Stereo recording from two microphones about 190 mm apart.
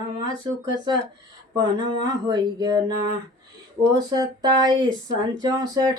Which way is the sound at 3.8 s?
20° right (ahead or behind).